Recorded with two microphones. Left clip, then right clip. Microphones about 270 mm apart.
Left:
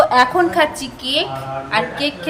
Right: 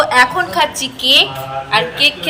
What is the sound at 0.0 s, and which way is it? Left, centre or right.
Speech, left.